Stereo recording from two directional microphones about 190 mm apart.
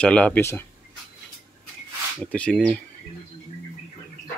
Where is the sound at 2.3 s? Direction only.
5° left (ahead or behind).